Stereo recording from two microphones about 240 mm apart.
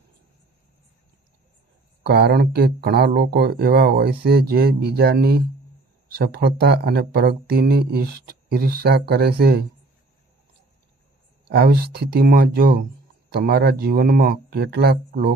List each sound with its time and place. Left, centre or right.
2.0 s speech: right
11.4 s speech: right